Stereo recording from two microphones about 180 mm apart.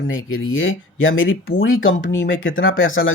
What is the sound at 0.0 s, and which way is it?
Speech, 90° left.